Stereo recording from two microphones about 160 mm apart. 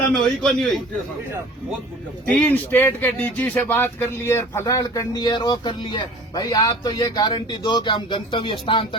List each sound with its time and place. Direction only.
0.1 s a man's voice: centre (ahead or behind)
2.2 s speech: 5° left (ahead or behind); by 9.0 s 30° left (ahead or behind)